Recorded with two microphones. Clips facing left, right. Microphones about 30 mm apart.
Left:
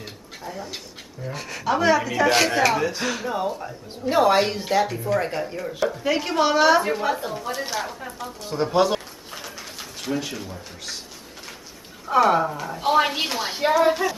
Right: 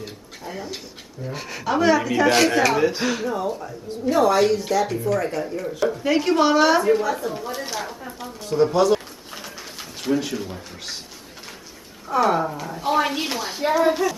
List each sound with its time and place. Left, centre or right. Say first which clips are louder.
1.2 s a woman's voice: left 1 dB; centre
2.8 s speech: right 4 dB; centre
3.4 s speech: right 1 dB; centre
4.1 s a woman's voice: right 1 dB; left
5.6 s a woman's voice: right 2 dB; centre
7.0 s speech: right 1 dB; left
7.6 s a woman's voice: left 1 dB; centre
9.3 s pigeon: even; centre
12.3 s speech: left 1 dB; centre
12.8 s speech: left 1 dB; left
13.7 s a woman's voice: even; centre